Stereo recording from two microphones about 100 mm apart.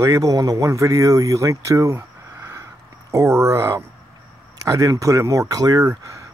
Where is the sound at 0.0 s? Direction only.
40° right (ahead or behind).